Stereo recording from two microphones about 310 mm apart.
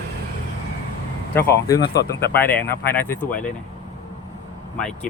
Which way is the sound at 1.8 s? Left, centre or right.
Left.